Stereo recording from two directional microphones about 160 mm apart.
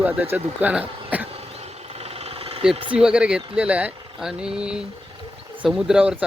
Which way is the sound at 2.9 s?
5° right (ahead or behind).